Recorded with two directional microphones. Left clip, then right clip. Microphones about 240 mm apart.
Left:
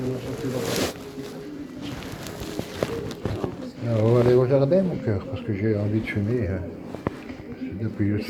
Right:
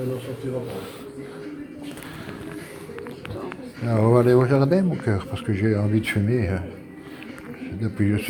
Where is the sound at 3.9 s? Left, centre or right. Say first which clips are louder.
Right 2 dB; right.